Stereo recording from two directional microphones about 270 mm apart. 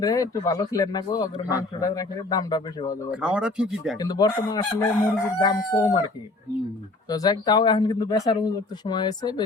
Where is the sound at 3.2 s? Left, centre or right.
Centre.